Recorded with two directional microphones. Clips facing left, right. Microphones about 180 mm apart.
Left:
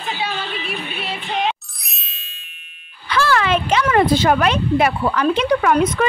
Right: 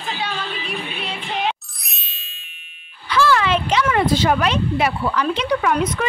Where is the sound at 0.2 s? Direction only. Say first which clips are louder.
Left 2 dB; 5° left (ahead or behind).